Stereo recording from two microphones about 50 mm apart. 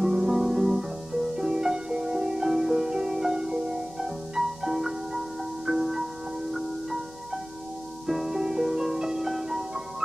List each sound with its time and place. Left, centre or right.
0.0 s music: centre
8.1 s music: centre